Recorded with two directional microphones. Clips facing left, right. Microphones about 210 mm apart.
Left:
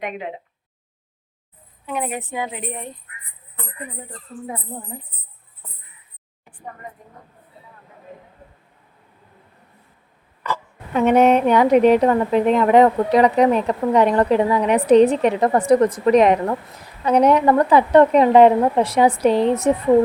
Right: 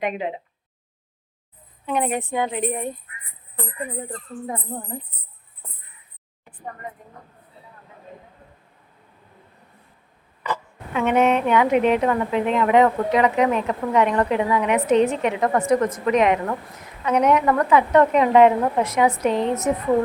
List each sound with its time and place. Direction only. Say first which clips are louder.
1.9 s a woman's voice: right 3 dB; 5° left (ahead or behind)
10.9 s a woman's voice: left 4 dB; 40° left (ahead or behind)